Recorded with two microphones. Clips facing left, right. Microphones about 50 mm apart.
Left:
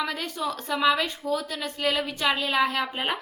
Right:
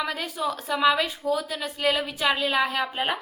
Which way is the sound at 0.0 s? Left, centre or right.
Centre.